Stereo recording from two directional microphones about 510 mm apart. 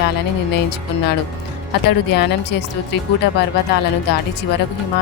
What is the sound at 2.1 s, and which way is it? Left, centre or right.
Speech, centre.